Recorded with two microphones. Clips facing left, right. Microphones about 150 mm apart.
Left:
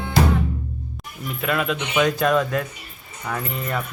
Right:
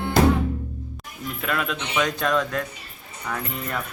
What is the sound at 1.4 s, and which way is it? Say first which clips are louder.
Speech: left 4 dB; 5° left (ahead or behind).